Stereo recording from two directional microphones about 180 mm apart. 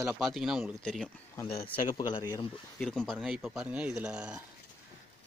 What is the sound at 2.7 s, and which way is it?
Speech, 5° left (ahead or behind).